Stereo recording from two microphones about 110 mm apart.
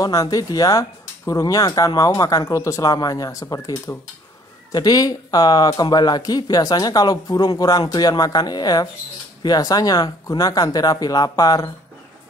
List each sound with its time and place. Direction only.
0.0 s speech: 35° left (ahead or behind)